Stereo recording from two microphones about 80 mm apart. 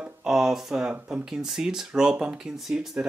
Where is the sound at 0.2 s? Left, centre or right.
Centre.